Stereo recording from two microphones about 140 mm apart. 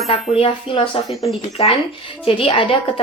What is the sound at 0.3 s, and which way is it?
A woman's voice, 40° left (ahead or behind).